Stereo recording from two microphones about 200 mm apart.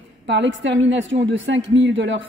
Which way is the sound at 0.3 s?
65° right (ahead or behind).